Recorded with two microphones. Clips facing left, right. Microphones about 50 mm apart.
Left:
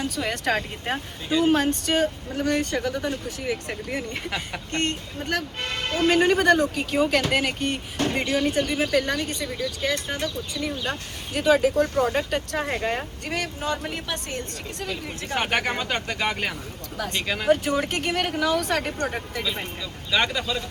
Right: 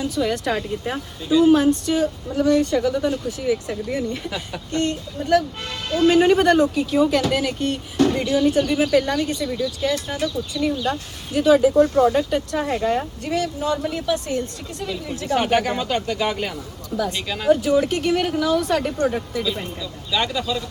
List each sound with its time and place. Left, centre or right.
0.2 s speech: left
20.1 s speech: left